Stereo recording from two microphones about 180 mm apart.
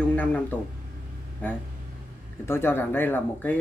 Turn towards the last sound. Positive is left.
turn(degrees=10)  # may be behind; listen again after turning